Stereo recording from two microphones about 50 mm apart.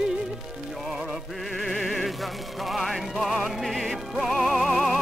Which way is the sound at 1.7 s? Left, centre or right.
Centre.